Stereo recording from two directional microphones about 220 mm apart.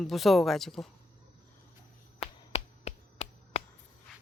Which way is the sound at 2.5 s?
30° left (ahead or behind).